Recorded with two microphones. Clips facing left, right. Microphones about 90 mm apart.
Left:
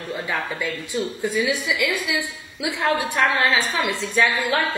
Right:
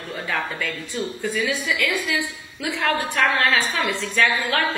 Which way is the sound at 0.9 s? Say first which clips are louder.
Left 2 dB; 20° left (ahead or behind).